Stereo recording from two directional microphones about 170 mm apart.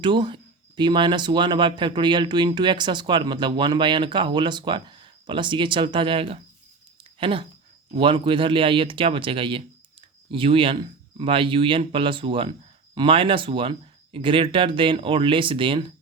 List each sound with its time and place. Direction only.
0.0 s speech: 25° right (ahead or behind)